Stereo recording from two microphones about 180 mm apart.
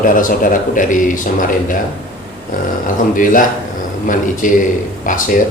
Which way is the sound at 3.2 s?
50° left (ahead or behind).